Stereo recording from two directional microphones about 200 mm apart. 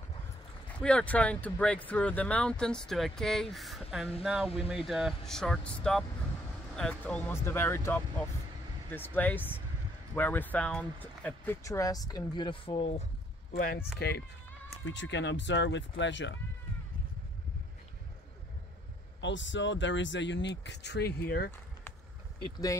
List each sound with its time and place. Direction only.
0.7 s speech: 5° left (ahead or behind); by 13.0 s 30° left (ahead or behind)
13.9 s speech: 55° left (ahead or behind)
19.2 s speech: 65° left (ahead or behind); by 21.5 s 50° left (ahead or behind)